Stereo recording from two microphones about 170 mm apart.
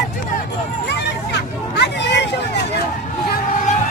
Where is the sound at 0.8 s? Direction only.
90° left.